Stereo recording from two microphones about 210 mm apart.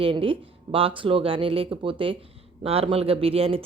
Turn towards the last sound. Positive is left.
turn(degrees=-25)  # may be behind; listen again after turning